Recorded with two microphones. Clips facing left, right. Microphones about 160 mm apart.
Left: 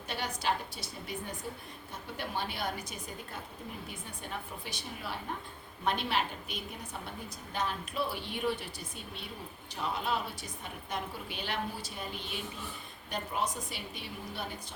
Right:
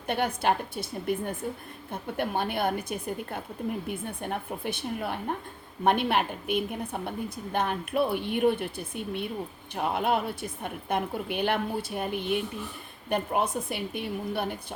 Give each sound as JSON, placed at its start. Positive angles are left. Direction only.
{"t": 0.1, "sound": "a woman's voice", "side_deg": -55}